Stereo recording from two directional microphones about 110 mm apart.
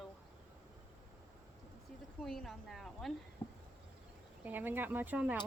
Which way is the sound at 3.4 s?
55° left (ahead or behind).